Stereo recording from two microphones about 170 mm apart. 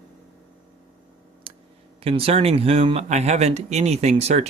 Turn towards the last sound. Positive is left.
turn(degrees=-40)  # may be behind; listen again after turning